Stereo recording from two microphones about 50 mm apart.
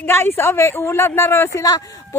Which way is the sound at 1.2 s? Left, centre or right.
Left.